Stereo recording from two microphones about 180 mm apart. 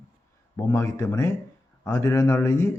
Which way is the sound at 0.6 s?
15° left (ahead or behind).